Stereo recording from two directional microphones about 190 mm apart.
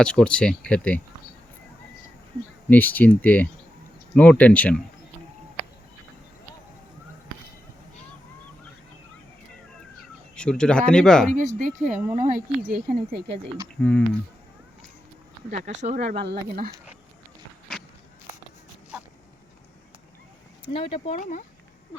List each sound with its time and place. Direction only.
0.0 s speech: 5° left (ahead or behind)
2.6 s speech: 10° left (ahead or behind)
10.3 s speech: 5° left (ahead or behind)
11.3 s speech: 40° right (ahead or behind)
13.8 s speech: 5° left (ahead or behind)
15.4 s speech: 40° right (ahead or behind)
16.1 s speech: 60° right (ahead or behind)
17.7 s biting: 5° left (ahead or behind)
20.7 s speech: 30° left (ahead or behind)